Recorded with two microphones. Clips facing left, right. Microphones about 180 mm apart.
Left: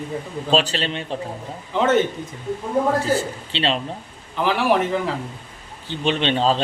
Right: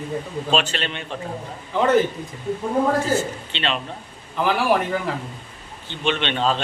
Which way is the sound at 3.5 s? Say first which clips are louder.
Left 4 dB; 35° left (ahead or behind).